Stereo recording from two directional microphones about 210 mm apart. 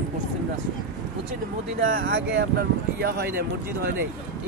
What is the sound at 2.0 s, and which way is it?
Speech, 55° right (ahead or behind).